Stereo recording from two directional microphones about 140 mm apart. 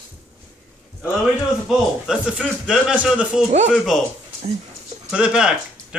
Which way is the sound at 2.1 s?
5° right (ahead or behind).